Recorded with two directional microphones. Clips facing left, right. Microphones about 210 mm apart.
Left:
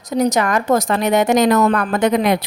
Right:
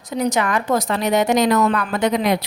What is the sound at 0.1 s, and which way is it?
A woman's voice, 40° left (ahead or behind).